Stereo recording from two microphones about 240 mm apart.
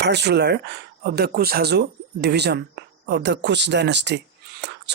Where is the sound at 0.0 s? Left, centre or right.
Right.